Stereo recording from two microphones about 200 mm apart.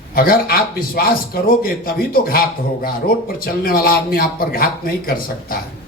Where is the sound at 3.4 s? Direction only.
50° left (ahead or behind).